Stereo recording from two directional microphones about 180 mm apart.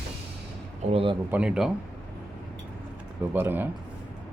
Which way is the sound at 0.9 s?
30° right (ahead or behind).